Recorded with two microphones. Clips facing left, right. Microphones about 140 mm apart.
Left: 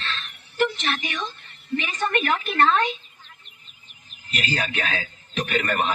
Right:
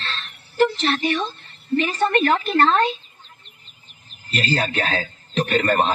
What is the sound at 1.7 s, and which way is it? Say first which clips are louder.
A man's voice: right 6 dB; 35° right (ahead or behind).